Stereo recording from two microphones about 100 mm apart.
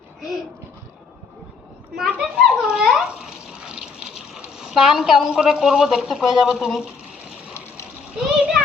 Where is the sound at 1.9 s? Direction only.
5° right (ahead or behind).